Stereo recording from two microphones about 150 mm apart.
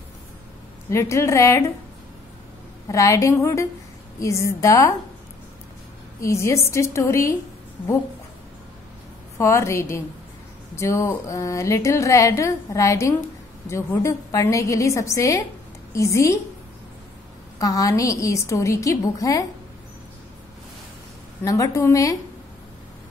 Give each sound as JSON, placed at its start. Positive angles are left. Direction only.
{"t": 0.8, "sound": "a woman's voice", "side_deg": 20}
{"t": 2.9, "sound": "a woman's voice", "side_deg": 20}
{"t": 6.2, "sound": "a woman's voice", "side_deg": 20}
{"t": 9.4, "sound": "a woman's voice", "side_deg": 20}
{"t": 17.6, "sound": "a woman's voice", "side_deg": 25}
{"t": 21.5, "sound": "a woman's voice", "side_deg": 20}